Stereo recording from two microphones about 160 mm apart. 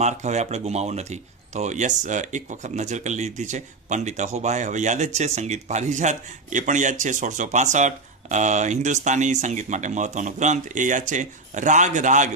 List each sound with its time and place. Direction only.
0.0 s speech: 45° right (ahead or behind)